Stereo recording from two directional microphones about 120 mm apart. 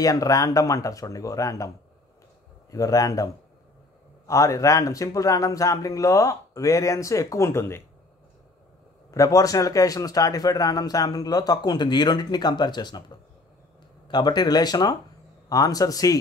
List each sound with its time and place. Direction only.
0.0 s speech: 30° left (ahead or behind)
2.7 s speech: 30° left (ahead or behind)
4.3 s speech: 25° left (ahead or behind)
9.1 s a man's voice: 30° left (ahead or behind)